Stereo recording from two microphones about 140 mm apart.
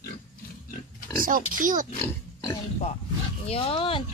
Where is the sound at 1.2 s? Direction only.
80° right.